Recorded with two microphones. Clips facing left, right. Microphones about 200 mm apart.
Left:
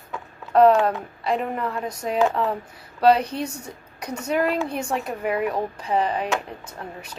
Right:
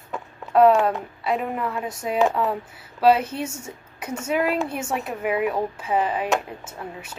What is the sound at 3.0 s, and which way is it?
Speech, 5° right (ahead or behind).